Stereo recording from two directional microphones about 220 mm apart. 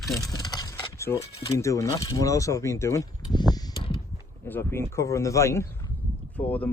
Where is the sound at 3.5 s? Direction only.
20° left (ahead or behind).